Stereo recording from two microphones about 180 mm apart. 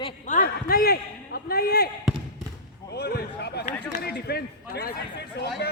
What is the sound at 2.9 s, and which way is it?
Speech, 65° left (ahead or behind).